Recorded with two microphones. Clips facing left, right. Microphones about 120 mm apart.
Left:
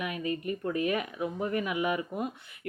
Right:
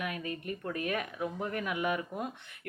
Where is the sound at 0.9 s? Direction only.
5° left (ahead or behind).